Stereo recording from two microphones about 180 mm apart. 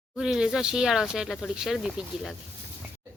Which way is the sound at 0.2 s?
5° right (ahead or behind).